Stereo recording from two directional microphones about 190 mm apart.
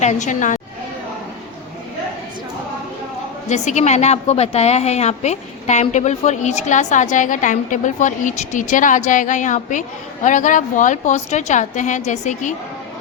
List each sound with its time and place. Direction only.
0.0 s a woman's voice: 40° left (ahead or behind)
3.5 s a woman's voice: 40° left (ahead or behind)